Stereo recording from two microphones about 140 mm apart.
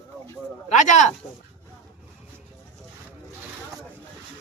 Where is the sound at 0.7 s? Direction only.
60° left (ahead or behind).